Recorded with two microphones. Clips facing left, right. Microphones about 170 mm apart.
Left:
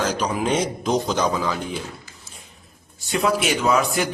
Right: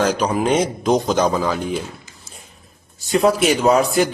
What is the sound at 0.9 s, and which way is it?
Speech, 50° right (ahead or behind).